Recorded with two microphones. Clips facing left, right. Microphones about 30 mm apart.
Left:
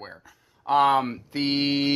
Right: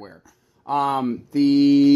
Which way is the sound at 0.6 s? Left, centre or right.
Left.